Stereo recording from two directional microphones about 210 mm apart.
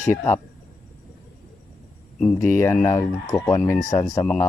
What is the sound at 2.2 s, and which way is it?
Speech, 5° left (ahead or behind).